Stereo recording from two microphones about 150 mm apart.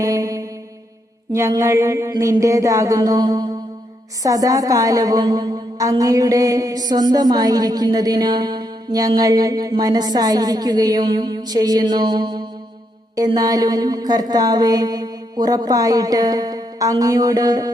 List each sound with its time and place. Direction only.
0.0 s mantra: 25° right (ahead or behind)
1.3 s a woman's voice: 20° right (ahead or behind)